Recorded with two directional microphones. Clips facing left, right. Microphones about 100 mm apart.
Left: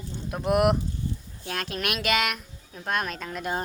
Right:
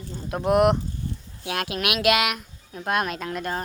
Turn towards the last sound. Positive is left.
turn(degrees=0)  # may be behind; listen again after turning